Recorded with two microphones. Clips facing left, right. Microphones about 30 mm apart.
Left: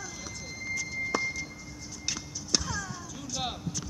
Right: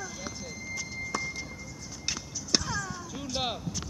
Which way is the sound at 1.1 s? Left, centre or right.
Centre.